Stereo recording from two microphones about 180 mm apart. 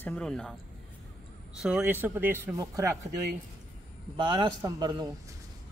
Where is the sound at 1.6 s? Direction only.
5° right (ahead or behind).